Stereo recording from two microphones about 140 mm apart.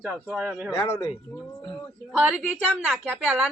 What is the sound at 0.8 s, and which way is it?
Speech, 25° left (ahead or behind).